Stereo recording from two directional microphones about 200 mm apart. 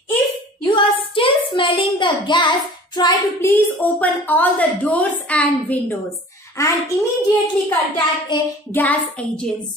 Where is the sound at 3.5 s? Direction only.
10° left (ahead or behind).